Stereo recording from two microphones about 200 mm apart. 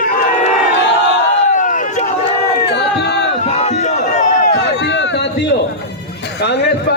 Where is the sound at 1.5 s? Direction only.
40° left (ahead or behind).